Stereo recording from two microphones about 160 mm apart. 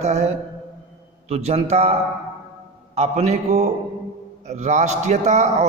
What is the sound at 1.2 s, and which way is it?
A man's voice, 40° right (ahead or behind).